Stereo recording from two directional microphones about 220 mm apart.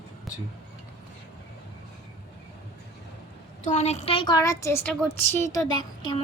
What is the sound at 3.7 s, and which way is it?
A woman's voice, 30° left (ahead or behind).